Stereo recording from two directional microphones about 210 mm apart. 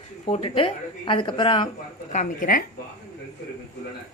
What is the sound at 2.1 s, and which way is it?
Speech, 40° left (ahead or behind).